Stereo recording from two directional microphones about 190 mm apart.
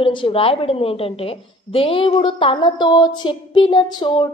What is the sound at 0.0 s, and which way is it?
A woman's voice, 25° left (ahead or behind).